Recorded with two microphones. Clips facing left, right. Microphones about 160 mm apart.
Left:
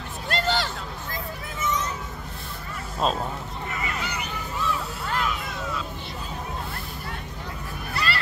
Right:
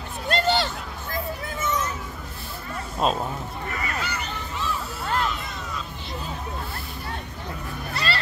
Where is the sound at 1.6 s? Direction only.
50° right (ahead or behind).